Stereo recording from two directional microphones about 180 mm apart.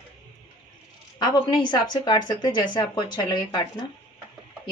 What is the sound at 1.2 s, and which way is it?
A woman's voice, 25° left (ahead or behind).